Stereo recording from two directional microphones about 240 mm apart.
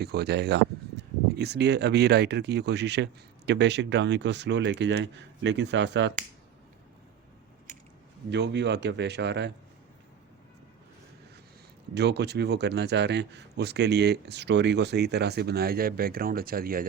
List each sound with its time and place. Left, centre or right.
0.0 s speech: right
8.3 s speech: right
11.9 s speech: right